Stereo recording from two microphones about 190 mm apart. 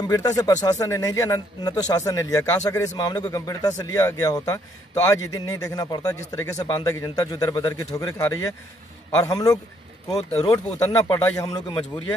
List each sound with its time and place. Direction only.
0.1 s speech: 20° left (ahead or behind)
9.2 s speech: 20° left (ahead or behind)